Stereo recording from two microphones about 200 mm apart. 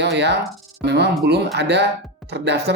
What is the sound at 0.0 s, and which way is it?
Speech, 55° right (ahead or behind).